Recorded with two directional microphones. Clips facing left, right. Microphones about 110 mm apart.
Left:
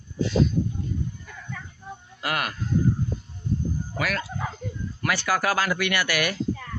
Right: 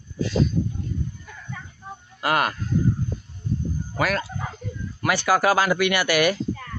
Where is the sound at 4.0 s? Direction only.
35° right (ahead or behind).